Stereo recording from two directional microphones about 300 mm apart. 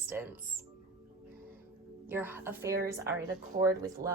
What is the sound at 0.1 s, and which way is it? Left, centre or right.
Speech, centre.